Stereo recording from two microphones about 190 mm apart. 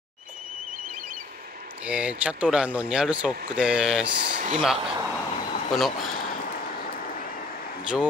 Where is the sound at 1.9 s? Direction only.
5° right (ahead or behind).